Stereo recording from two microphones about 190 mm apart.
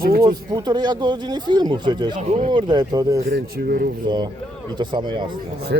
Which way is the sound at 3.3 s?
55° right (ahead or behind).